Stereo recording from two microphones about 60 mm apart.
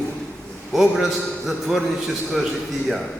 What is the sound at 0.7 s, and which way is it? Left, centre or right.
A man's voice, centre.